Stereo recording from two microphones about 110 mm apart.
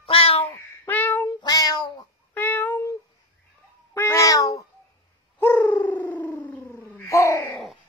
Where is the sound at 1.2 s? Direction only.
35° left (ahead or behind).